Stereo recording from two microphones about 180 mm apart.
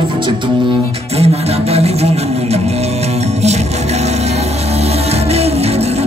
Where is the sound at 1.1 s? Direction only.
35° right (ahead or behind).